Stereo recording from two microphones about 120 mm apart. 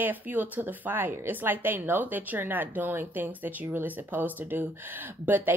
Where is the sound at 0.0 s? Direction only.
15° right (ahead or behind).